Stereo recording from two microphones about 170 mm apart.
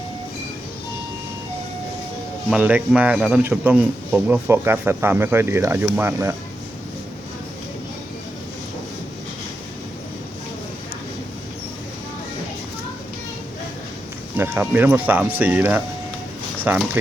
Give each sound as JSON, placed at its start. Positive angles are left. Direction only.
{"t": 2.5, "sound": "speech", "side_deg": -10}
{"t": 14.3, "sound": "speech", "side_deg": -15}